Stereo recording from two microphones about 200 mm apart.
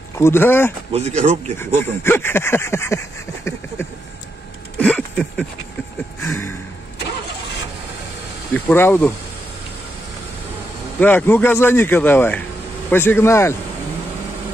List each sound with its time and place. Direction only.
0.2 s speech: 10° left (ahead or behind)
0.9 s speech: 35° right (ahead or behind)
1.6 s speech: 10° left (ahead or behind)
4.7 s a sound: 5° left (ahead or behind)
6.2 s speech: 15° left (ahead or behind)
8.5 s speech: 10° left (ahead or behind)
11.0 s speech: 10° left (ahead or behind)